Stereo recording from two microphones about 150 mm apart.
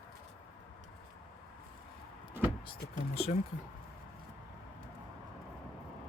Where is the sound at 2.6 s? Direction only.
40° left (ahead or behind).